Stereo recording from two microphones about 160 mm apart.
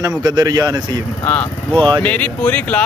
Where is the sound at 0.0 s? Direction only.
25° right (ahead or behind).